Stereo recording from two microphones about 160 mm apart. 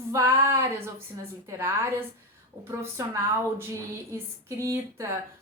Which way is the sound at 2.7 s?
15° right (ahead or behind).